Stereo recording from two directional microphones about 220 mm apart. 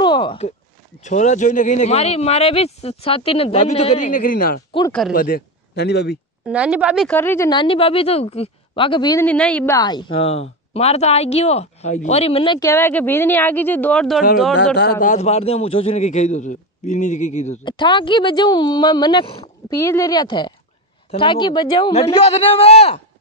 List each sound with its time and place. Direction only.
0.0 s a sound: 20° left (ahead or behind)
1.0 s speech: 35° left (ahead or behind); by 6.1 s 50° left (ahead or behind)
6.4 s a woman's voice: 5° right (ahead or behind)
7.1 s speech: 10° left (ahead or behind)
14.8 s speech: 40° left (ahead or behind)